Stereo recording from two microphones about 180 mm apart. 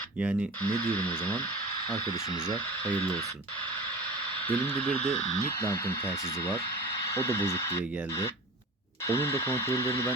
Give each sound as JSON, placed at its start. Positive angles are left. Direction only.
{"t": 0.6, "sound": "speech", "side_deg": 10}
{"t": 4.4, "sound": "speech", "side_deg": 10}